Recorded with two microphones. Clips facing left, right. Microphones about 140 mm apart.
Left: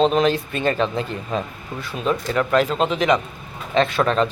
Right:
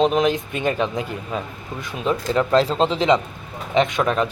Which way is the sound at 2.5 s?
30° right (ahead or behind).